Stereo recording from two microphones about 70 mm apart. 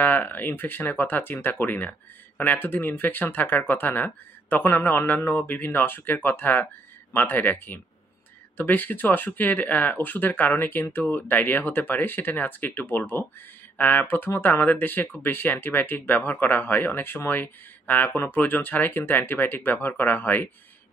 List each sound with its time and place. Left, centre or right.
0.0 s speech: left